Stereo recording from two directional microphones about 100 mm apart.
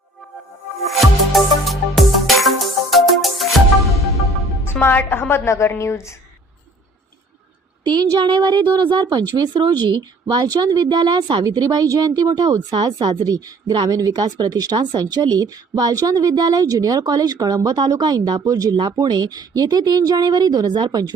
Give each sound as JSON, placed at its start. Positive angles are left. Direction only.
{"t": 0.9, "sound": "music", "side_deg": 0}
{"t": 4.6, "sound": "a woman's voice", "side_deg": 20}
{"t": 7.9, "sound": "a woman's voice", "side_deg": -55}
{"t": 18.8, "sound": "a woman's voice", "side_deg": -50}